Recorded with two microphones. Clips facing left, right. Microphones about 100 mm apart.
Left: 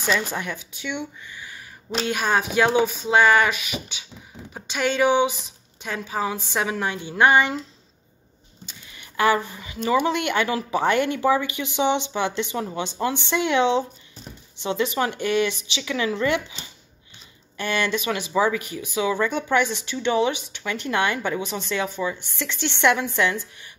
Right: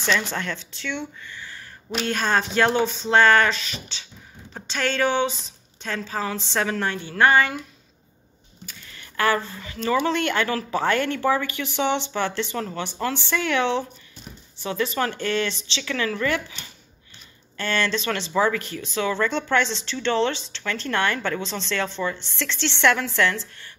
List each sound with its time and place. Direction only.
0.0 s speech: 10° left (ahead or behind)
8.6 s speech: 15° left (ahead or behind)